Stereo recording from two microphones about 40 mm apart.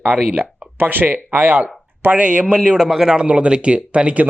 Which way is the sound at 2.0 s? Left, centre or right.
Right.